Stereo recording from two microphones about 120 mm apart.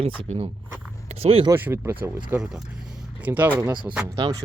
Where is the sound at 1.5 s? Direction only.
15° right (ahead or behind).